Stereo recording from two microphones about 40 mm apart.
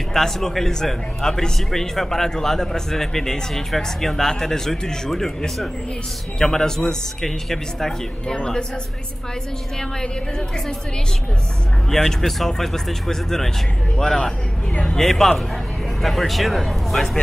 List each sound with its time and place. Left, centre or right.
0.1 s speech: centre
6.4 s speech: centre
8.4 s speech: left
9.8 s speech: centre
11.9 s speech: centre